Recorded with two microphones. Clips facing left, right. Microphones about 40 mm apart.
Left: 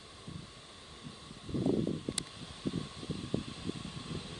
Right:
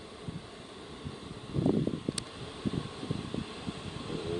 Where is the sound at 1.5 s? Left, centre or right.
Centre.